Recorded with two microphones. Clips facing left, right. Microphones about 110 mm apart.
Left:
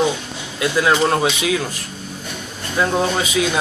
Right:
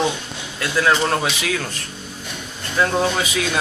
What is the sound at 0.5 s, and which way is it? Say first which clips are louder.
Speech: left 2 dB; 15° left (ahead or behind).